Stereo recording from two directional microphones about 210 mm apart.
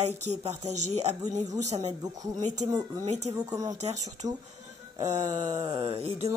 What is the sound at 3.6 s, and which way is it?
Speech, 35° right (ahead or behind).